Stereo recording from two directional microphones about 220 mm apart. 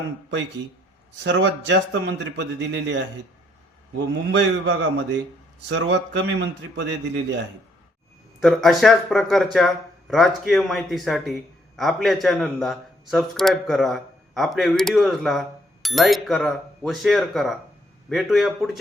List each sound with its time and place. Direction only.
1.2 s a man's voice: 55° right (ahead or behind)
4.3 s a man's voice: 55° right (ahead or behind)
8.4 s speech: centre (ahead or behind)